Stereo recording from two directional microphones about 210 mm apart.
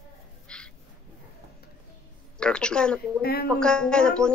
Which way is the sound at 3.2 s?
45° left (ahead or behind).